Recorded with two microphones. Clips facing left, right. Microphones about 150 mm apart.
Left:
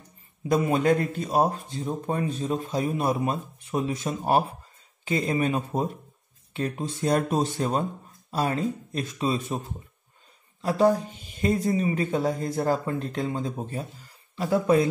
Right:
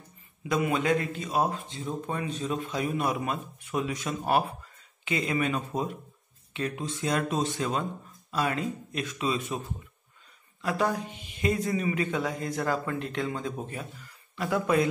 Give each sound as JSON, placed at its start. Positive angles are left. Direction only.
{"t": 0.4, "sound": "speech", "side_deg": 35}
{"t": 10.6, "sound": "speech", "side_deg": 35}